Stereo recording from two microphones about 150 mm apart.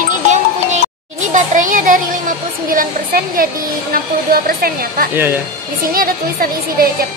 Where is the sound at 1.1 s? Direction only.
60° right (ahead or behind); by 7.1 s 80° right.